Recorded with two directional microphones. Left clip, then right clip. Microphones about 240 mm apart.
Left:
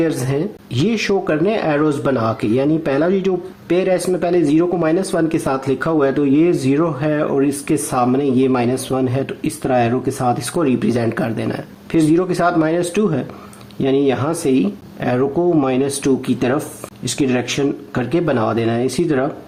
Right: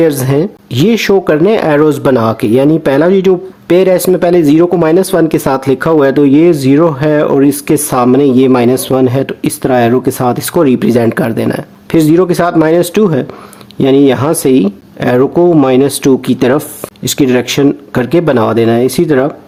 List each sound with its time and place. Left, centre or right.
0.0 s speech: right